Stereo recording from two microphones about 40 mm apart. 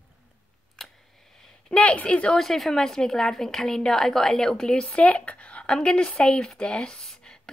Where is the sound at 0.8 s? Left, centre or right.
Centre.